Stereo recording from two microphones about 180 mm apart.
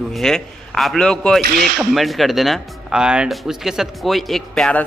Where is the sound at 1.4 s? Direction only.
50° right (ahead or behind).